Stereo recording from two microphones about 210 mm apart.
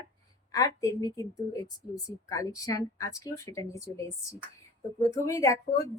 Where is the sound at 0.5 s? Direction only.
15° left (ahead or behind).